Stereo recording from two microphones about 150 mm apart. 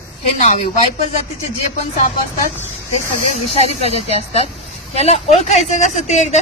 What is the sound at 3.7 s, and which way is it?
Speech, 40° left (ahead or behind).